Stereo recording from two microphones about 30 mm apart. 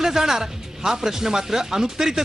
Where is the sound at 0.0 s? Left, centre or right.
Centre.